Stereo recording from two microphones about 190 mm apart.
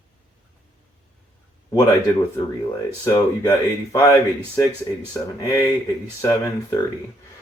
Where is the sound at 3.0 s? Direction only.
20° left (ahead or behind).